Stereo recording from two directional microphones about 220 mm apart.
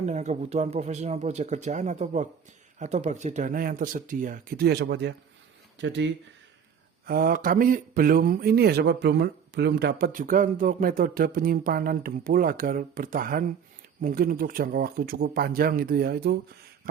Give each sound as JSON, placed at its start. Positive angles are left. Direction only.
{"t": 0.0, "sound": "speech", "side_deg": -30}
{"t": 7.0, "sound": "speech", "side_deg": -40}
{"t": 16.9, "sound": "a sound", "side_deg": -45}